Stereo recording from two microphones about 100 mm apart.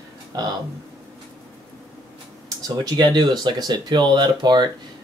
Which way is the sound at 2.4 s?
45° right (ahead or behind).